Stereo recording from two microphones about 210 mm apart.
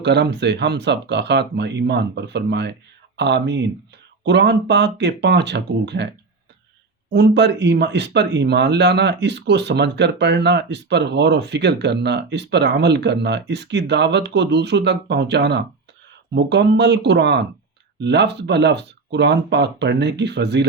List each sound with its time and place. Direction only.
0.0 s speech: 55° right (ahead or behind)
7.1 s speech: 55° right (ahead or behind)